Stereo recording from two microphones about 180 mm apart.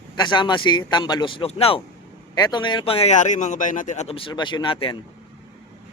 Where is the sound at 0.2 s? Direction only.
25° left (ahead or behind).